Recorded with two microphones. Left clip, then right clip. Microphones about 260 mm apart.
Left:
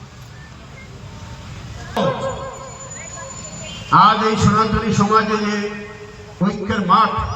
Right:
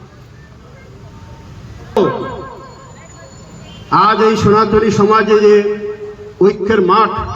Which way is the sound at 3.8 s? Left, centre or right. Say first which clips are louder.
Right 2 dB; right.